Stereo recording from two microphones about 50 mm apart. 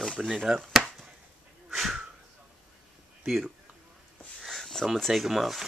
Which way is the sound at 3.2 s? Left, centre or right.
Centre.